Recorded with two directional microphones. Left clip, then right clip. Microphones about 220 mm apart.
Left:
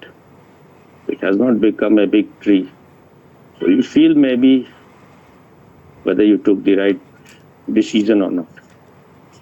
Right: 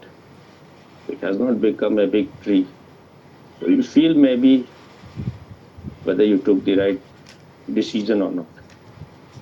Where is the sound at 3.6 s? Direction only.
65° left (ahead or behind).